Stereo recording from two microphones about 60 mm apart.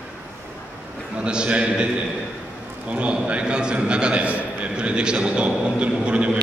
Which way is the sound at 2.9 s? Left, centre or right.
Right.